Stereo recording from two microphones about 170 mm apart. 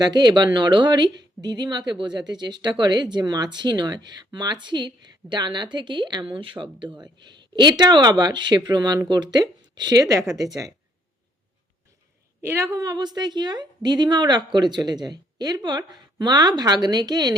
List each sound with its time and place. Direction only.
0.0 s a woman's voice: 25° right (ahead or behind)
12.4 s a woman's voice: 15° right (ahead or behind)